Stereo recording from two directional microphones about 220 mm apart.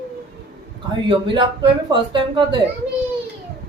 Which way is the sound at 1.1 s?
20° right (ahead or behind).